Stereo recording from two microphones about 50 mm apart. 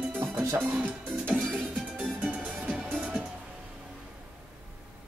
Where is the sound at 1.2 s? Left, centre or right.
Right.